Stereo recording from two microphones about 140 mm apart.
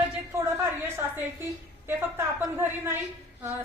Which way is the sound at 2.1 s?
15° right (ahead or behind).